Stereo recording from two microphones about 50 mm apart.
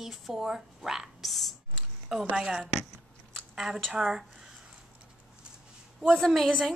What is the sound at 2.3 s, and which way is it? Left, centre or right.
Speech, centre.